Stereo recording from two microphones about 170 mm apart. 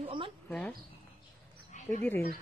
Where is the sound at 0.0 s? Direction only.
30° right (ahead or behind).